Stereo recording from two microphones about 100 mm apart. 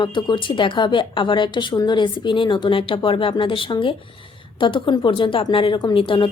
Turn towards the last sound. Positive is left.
turn(degrees=60)  # may be behind; listen again after turning